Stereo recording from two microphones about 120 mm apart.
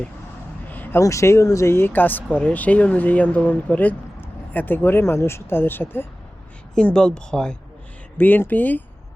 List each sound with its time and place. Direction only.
0.7 s a sound: 15° left (ahead or behind)
1.0 s speech: 25° left (ahead or behind)
6.7 s speech: 5° left (ahead or behind)